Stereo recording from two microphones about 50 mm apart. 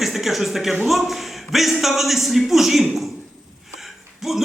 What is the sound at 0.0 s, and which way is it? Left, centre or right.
A man's voice, centre.